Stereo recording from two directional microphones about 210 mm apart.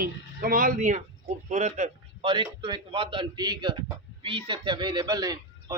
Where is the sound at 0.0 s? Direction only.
45° right (ahead or behind).